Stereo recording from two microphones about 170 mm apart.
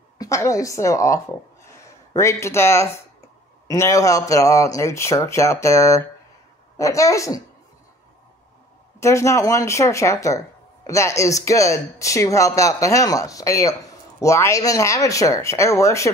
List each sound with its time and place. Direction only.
0.2 s speech: 20° left (ahead or behind)
9.0 s speech: 15° left (ahead or behind)